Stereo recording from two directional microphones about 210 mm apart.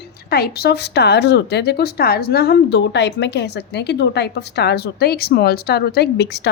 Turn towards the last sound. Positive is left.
turn(degrees=55)  # may be behind; listen again after turning